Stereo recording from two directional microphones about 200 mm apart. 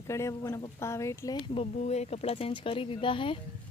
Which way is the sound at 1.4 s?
30° left (ahead or behind).